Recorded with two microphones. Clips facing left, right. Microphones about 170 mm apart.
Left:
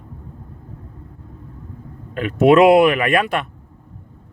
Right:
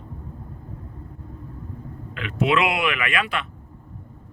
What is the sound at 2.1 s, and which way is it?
Speech, 45° left (ahead or behind).